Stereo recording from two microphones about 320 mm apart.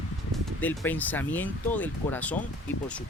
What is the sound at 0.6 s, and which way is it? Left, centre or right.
Speech, centre.